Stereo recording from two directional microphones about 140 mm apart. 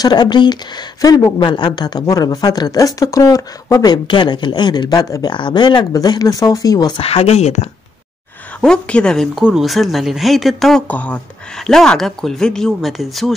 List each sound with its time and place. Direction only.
0.0 s speech: 30° left (ahead or behind)
7.0 s speech: 45° left (ahead or behind)
8.5 s speech: 10° left (ahead or behind)
10.9 s speech: 10° left (ahead or behind)